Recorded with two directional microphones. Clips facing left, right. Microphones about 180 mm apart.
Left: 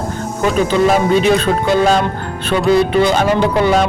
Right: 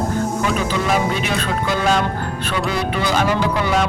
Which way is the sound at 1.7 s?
35° left (ahead or behind).